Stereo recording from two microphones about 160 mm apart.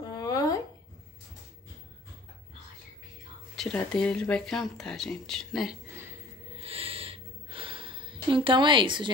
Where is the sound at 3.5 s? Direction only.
5° left (ahead or behind).